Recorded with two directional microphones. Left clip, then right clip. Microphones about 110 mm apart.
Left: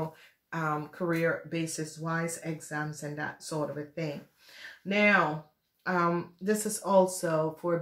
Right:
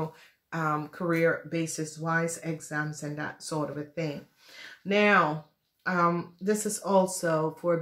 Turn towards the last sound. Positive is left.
turn(degrees=-20)  # may be behind; listen again after turning